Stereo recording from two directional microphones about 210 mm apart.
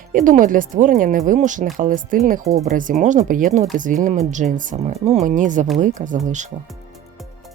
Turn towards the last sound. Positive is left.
turn(degrees=-35)  # may be behind; listen again after turning